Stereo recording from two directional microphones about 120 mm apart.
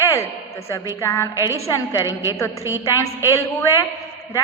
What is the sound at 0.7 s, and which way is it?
Speech, 25° left (ahead or behind).